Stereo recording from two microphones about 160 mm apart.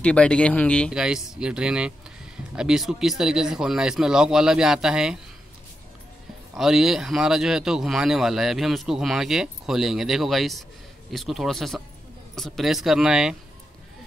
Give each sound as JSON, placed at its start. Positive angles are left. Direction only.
{"t": 0.0, "sound": "speech", "side_deg": 5}
{"t": 0.9, "sound": "speech", "side_deg": -5}
{"t": 6.5, "sound": "speech", "side_deg": 0}